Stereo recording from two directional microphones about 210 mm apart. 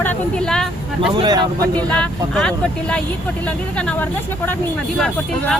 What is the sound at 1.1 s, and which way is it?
Speech, 20° right (ahead or behind).